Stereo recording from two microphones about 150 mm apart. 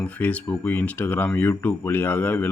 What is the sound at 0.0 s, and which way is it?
Speech, 10° left (ahead or behind).